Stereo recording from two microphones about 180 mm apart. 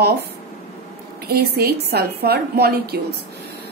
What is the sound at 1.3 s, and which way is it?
A woman's voice, 60° right (ahead or behind).